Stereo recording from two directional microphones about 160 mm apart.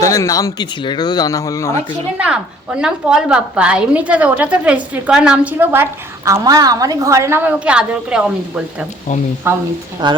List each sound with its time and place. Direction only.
0.0 s speech: 20° left (ahead or behind)
2.1 s a woman's voice: 5° right (ahead or behind)
10.0 s speech: 30° right (ahead or behind)